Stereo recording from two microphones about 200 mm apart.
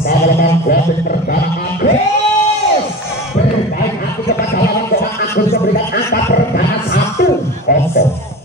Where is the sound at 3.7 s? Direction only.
50° left (ahead or behind).